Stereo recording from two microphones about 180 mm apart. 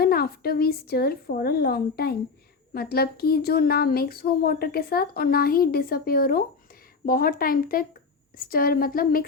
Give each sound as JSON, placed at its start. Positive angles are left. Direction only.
{"t": 0.0, "sound": "a woman's voice", "side_deg": 60}